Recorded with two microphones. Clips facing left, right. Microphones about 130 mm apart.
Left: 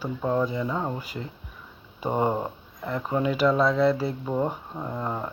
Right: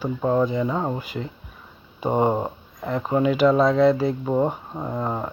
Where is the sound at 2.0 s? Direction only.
20° right (ahead or behind).